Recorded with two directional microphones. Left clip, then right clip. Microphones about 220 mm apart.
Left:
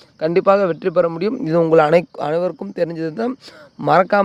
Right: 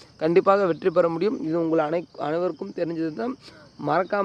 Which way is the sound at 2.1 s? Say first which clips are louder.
Left 6 dB; 30° left (ahead or behind).